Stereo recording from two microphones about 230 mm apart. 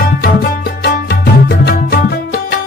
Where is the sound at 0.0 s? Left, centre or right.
Left.